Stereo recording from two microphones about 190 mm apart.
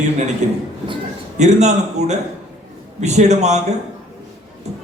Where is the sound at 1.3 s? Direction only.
35° right (ahead or behind).